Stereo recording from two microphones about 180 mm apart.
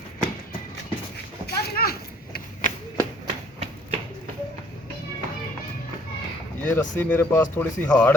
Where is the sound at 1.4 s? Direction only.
55° left (ahead or behind).